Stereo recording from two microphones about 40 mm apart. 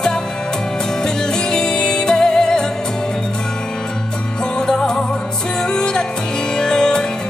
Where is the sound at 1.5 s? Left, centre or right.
Centre.